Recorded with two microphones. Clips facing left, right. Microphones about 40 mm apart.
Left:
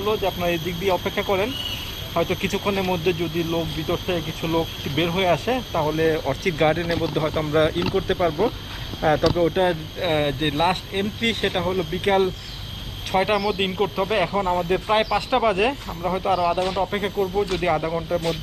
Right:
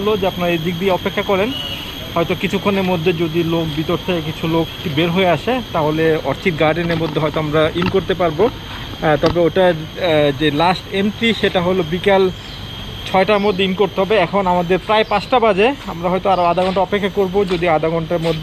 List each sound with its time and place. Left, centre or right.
0.0 s speech: right
16.0 s speech: right